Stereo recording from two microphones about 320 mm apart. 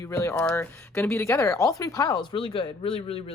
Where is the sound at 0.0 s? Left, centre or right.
Centre.